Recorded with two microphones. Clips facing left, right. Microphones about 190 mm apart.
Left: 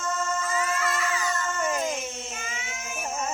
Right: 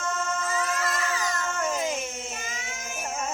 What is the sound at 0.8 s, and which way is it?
Cat, 35° right (ahead or behind).